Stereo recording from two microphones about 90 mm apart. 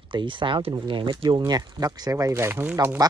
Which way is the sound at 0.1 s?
65° right (ahead or behind).